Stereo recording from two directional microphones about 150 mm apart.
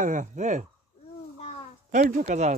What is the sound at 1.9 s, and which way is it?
Speech, 55° right (ahead or behind).